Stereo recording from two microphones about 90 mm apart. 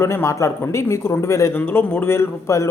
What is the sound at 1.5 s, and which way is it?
A man's voice, 20° left (ahead or behind).